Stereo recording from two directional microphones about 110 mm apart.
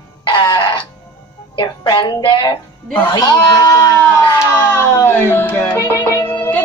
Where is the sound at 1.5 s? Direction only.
40° left (ahead or behind).